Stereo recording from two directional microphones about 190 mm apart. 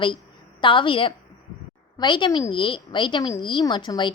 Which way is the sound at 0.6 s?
25° left (ahead or behind).